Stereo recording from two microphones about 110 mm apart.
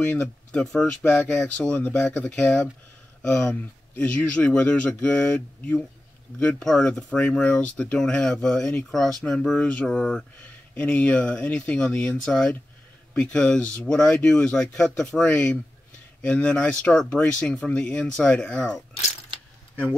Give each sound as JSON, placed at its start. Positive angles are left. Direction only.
{"t": 0.0, "sound": "speech", "side_deg": 15}